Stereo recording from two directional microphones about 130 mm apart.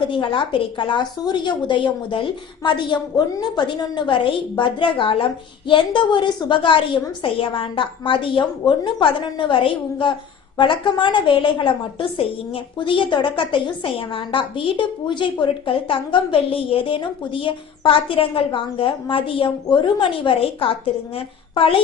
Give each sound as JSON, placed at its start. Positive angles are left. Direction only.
{"t": 0.1, "sound": "a woman's voice", "side_deg": 40}